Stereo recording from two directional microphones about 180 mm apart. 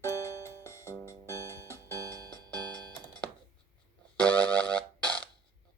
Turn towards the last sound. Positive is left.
turn(degrees=5)  # may be behind; listen again after turning